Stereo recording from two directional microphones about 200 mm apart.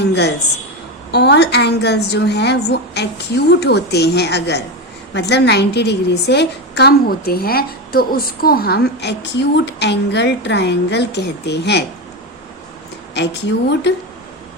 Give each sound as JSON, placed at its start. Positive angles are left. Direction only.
{"t": 0.0, "sound": "a woman's voice", "side_deg": 55}
{"t": 13.1, "sound": "a woman's voice", "side_deg": 60}